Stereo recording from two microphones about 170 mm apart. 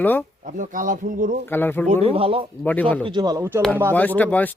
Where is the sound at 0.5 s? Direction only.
50° right (ahead or behind).